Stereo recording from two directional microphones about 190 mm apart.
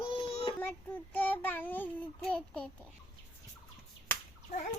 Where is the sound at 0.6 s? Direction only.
10° left (ahead or behind).